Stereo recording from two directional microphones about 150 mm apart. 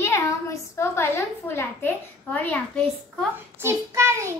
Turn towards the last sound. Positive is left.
turn(degrees=-20)  # may be behind; listen again after turning